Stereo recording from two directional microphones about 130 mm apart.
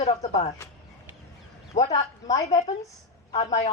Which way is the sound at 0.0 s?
60° left (ahead or behind).